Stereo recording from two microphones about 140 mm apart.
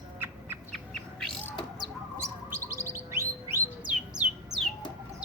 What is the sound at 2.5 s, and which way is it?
Bird, 20° right (ahead or behind).